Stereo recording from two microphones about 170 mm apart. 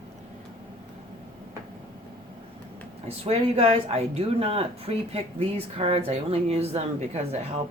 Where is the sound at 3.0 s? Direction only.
35° right (ahead or behind).